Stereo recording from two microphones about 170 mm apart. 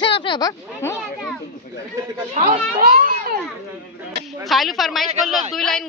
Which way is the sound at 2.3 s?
40° right (ahead or behind).